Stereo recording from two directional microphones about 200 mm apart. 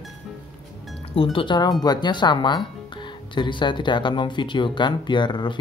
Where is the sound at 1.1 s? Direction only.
25° left (ahead or behind).